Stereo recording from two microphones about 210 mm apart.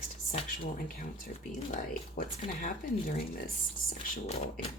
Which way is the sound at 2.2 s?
40° left (ahead or behind).